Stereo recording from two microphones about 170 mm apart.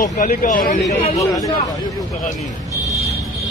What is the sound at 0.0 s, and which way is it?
Speech, 55° left (ahead or behind).